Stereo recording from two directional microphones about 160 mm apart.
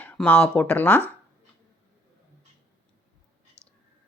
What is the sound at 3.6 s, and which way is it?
Whispering, 15° right (ahead or behind).